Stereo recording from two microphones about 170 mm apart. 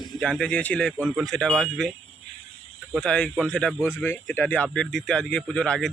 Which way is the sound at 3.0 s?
5° left (ahead or behind).